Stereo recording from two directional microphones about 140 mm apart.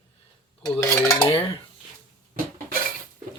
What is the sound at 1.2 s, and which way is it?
Dishes, 40° left (ahead or behind).